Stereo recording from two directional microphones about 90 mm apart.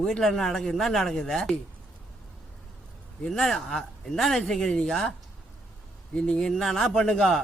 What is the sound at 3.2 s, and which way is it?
Speech, 5° left (ahead or behind).